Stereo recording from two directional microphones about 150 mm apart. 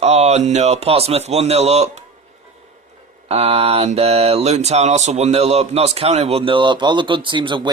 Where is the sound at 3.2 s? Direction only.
45° right (ahead or behind).